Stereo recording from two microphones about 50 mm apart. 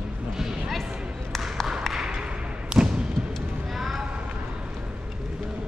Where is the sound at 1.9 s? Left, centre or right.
Centre.